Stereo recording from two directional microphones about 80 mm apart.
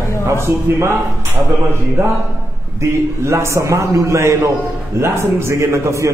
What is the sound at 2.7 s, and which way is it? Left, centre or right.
A man's voice, right.